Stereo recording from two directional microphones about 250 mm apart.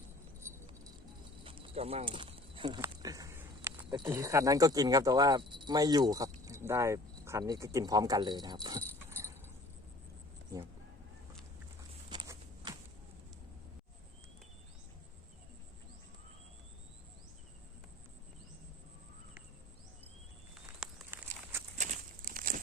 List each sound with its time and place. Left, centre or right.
0.4 s keys jangling: centre
1.5 s speech: right
12.1 s walk: centre
20.7 s a sound: centre
21.8 s crumpling: right